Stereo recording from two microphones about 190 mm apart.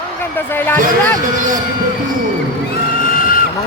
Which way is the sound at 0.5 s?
10° left (ahead or behind).